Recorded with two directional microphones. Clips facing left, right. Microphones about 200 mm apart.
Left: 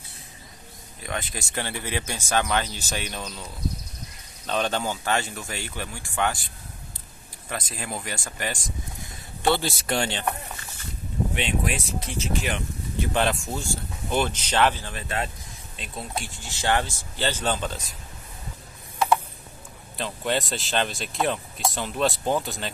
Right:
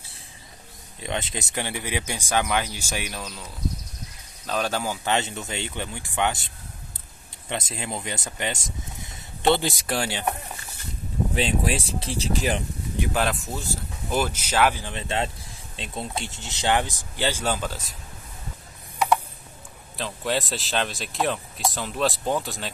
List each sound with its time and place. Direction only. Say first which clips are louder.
1.0 s speech: right 3 dB; 25° right (ahead or behind); by 3.4 s centre (ahead or behind)
4.5 s speech: even; 5° right (ahead or behind)
5.0 s speech: right 1 dB; 20° right (ahead or behind)
9.8 s speech: left 2 dB; 5° right (ahead or behind)
11.3 s speech: right 5 dB; 35° right (ahead or behind)
13.1 s speech: left 3 dB; centre (ahead or behind)
20.0 s speech: even; centre (ahead or behind)